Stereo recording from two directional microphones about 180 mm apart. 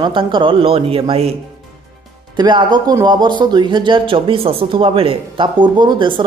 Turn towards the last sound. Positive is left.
turn(degrees=-25)  # may be behind; listen again after turning